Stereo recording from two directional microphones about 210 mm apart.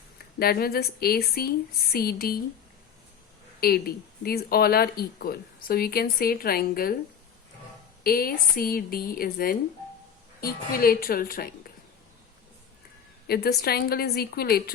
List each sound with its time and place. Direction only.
0.3 s speech: 45° left (ahead or behind)
3.6 s speech: 45° left (ahead or behind)
8.0 s speech: 45° left (ahead or behind)
13.2 s speech: 45° left (ahead or behind)